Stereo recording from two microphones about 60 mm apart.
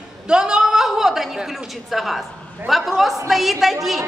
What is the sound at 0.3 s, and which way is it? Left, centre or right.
A woman's voice, centre.